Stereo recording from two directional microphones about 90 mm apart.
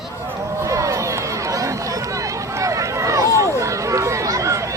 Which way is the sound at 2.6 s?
35° right (ahead or behind).